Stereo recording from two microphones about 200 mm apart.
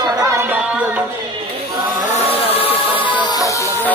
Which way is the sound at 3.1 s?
20° left (ahead or behind).